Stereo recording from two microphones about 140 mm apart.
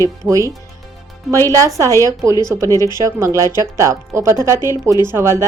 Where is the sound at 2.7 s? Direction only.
25° left (ahead or behind).